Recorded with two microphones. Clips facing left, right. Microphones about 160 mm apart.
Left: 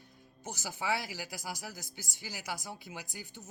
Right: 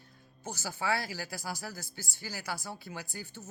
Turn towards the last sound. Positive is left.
turn(degrees=15)  # may be behind; listen again after turning